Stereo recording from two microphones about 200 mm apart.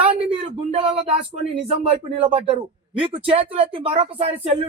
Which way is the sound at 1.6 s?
30° right (ahead or behind).